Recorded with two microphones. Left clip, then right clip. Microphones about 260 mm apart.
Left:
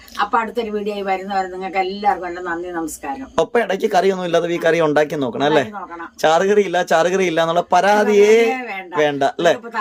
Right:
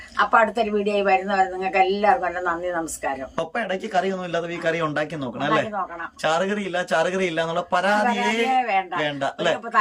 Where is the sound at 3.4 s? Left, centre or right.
Left.